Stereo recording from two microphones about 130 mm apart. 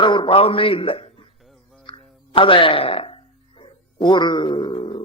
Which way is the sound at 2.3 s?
40° left (ahead or behind).